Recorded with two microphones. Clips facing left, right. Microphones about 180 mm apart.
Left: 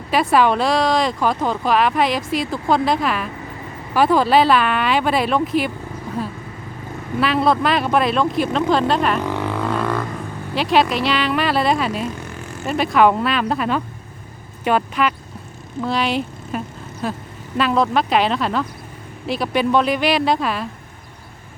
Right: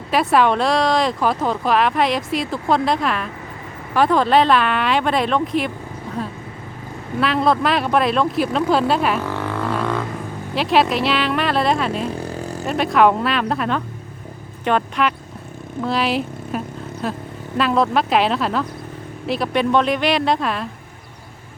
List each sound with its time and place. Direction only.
0.1 s speech: centre (ahead or behind)
9.2 s vehicle: 15° left (ahead or behind)
9.6 s didgeridoo: centre (ahead or behind)
10.5 s speech: centre (ahead or behind)
12.0 s vehicle: 35° right (ahead or behind)
12.6 s a woman's voice: centre (ahead or behind)